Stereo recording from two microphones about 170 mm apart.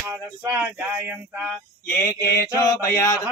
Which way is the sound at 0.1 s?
15° right (ahead or behind).